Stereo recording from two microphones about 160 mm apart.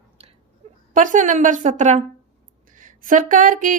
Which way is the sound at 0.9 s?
55° right (ahead or behind).